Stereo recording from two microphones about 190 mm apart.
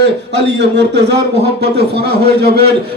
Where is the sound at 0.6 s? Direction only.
65° right (ahead or behind).